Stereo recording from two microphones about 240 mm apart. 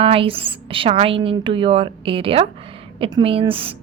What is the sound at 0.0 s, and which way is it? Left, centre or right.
Speech, right.